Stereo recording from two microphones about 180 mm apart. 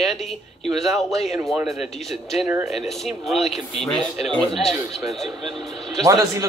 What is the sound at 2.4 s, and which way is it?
Speech, 15° right (ahead or behind).